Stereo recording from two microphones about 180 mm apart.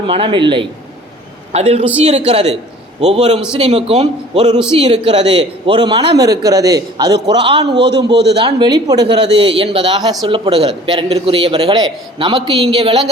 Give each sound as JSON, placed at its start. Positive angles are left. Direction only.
{"t": 0.1, "sound": "a man's voice", "side_deg": -30}
{"t": 8.1, "sound": "a man's voice", "side_deg": -70}
{"t": 8.4, "sound": "a man's voice", "side_deg": -25}